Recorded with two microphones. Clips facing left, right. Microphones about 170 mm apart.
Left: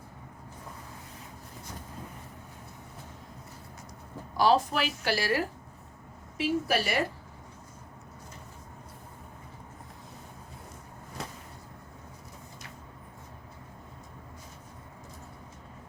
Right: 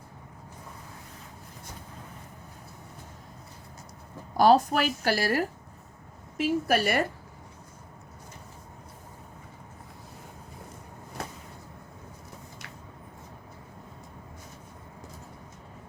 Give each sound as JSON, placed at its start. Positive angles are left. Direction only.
{"t": 4.4, "sound": "a woman's voice", "side_deg": -45}